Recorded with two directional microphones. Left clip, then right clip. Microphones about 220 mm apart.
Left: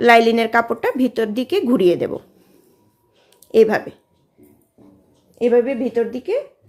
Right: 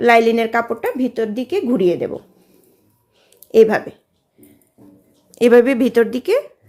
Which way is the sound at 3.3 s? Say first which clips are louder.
Right 2 dB; centre (ahead or behind).